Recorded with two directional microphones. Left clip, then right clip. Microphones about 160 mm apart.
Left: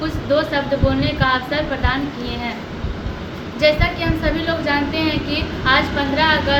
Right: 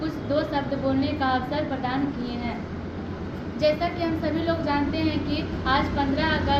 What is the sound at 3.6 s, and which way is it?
A woman's voice, 20° left (ahead or behind).